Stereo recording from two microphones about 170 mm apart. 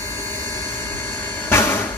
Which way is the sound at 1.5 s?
15° left (ahead or behind).